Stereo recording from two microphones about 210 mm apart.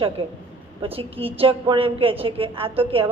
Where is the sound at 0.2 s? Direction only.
25° right (ahead or behind).